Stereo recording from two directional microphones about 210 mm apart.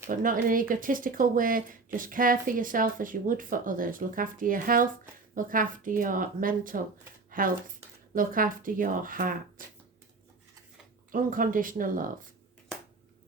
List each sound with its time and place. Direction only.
0.1 s speech: 40° right (ahead or behind)
7.3 s a sound: 40° right (ahead or behind)
8.1 s speech: 40° right (ahead or behind)
11.1 s speech: 40° right (ahead or behind)